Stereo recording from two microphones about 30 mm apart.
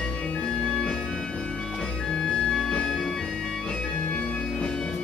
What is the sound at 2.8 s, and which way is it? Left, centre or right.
Music, centre.